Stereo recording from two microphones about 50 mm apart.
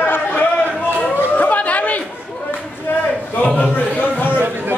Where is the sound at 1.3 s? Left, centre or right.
Left.